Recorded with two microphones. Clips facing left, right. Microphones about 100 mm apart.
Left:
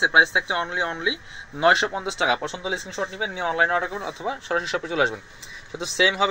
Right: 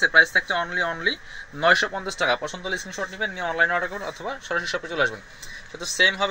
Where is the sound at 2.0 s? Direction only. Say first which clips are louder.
Even; 25° left (ahead or behind).